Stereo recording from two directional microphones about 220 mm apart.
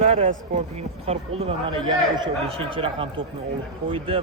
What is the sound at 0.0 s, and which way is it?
A man's voice, 30° right (ahead or behind).